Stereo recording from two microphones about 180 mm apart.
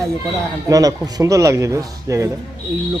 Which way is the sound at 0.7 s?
20° right (ahead or behind).